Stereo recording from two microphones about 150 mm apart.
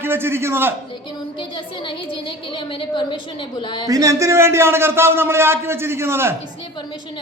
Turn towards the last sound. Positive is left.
turn(degrees=-15)  # may be behind; listen again after turning